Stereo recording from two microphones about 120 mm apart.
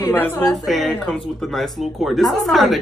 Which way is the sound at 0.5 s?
Centre (ahead or behind).